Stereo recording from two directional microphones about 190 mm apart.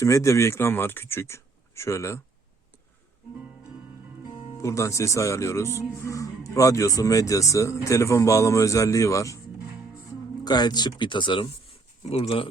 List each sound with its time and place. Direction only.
0.0 s speech: 15° left (ahead or behind)
4.6 s speech: 15° left (ahead or behind)
10.4 s speech: 20° left (ahead or behind)